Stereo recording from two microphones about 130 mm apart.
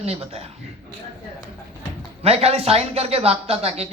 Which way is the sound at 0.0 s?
50° right (ahead or behind).